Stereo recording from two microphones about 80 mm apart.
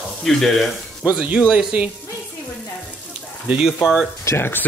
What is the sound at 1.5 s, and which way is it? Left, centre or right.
Speech, centre.